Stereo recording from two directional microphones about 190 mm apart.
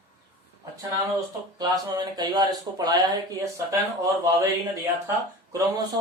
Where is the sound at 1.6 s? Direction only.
20° right (ahead or behind).